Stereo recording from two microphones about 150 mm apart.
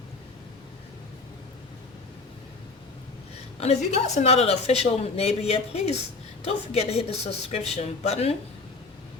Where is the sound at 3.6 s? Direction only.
45° left (ahead or behind).